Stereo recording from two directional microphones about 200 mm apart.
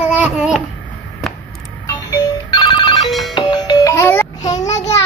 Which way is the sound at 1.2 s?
Centre (ahead or behind).